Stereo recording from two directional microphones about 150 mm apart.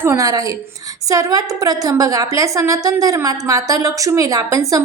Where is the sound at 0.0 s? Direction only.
20° right (ahead or behind).